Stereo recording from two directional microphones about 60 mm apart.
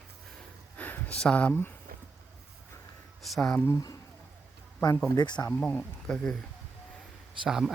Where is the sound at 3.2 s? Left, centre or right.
Centre.